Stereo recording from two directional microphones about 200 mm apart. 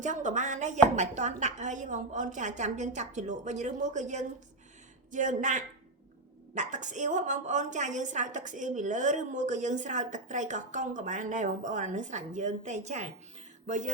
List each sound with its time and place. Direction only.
0.0 s a woman's voice: 40° right (ahead or behind)